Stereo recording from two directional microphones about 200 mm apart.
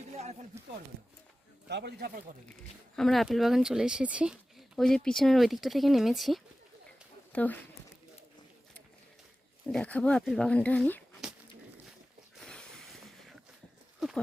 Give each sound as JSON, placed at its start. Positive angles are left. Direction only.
{"t": 0.5, "sound": "speech", "side_deg": -15}
{"t": 1.6, "sound": "speech", "side_deg": -55}
{"t": 2.9, "sound": "speech", "side_deg": 0}
{"t": 9.6, "sound": "speech", "side_deg": 5}
{"t": 12.4, "sound": "a sound", "side_deg": 0}